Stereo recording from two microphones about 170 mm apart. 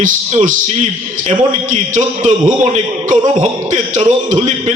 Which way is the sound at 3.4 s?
45° right (ahead or behind).